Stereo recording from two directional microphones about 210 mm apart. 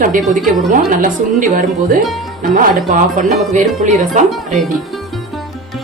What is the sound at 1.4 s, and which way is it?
Speech, 40° right (ahead or behind).